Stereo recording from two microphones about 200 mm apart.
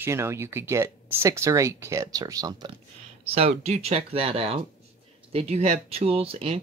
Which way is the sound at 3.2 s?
30° right (ahead or behind).